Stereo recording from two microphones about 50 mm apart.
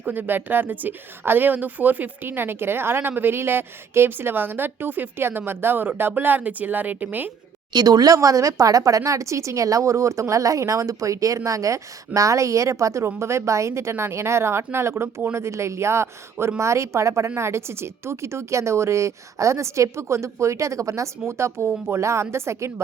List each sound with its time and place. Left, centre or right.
0.1 s speech: right
8.1 s a woman's voice: right
13.1 s speech: right